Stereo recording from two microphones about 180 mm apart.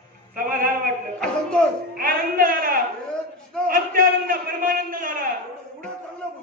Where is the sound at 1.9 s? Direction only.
50° right (ahead or behind).